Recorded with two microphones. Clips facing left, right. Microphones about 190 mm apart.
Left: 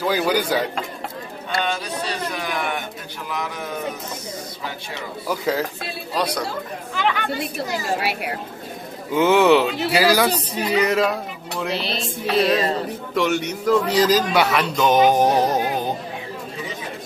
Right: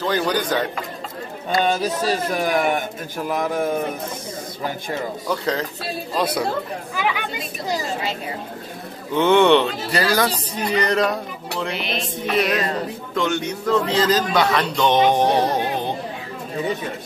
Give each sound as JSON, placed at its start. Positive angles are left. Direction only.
{"t": 0.0, "sound": "a man's voice", "side_deg": 10}
{"t": 1.6, "sound": "speech", "side_deg": -40}
{"t": 5.3, "sound": "a man's voice", "side_deg": 5}
{"t": 6.1, "sound": "a woman's voice", "side_deg": -5}
{"t": 7.8, "sound": "speech", "side_deg": 70}
{"t": 9.1, "sound": "speech", "side_deg": 5}
{"t": 11.7, "sound": "music", "side_deg": 35}
{"t": 13.1, "sound": "a man's voice", "side_deg": 5}